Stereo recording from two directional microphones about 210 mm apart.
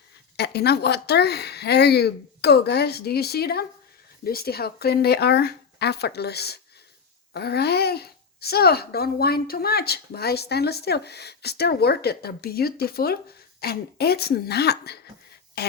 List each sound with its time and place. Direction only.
0.3 s a child's voice: 50° left (ahead or behind)